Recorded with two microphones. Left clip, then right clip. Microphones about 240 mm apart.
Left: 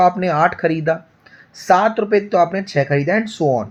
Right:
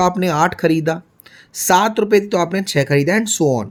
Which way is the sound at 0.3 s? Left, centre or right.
Right.